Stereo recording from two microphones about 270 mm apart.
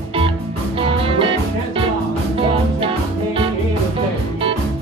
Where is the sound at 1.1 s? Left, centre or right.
Centre.